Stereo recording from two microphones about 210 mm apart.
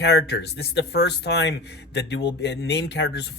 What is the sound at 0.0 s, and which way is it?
Speech, 55° left (ahead or behind).